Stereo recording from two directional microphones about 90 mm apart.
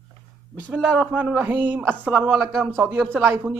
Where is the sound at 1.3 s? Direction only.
20° right (ahead or behind).